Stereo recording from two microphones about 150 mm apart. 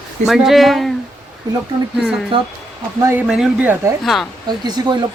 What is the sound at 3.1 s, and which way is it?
Speech, 10° right (ahead or behind).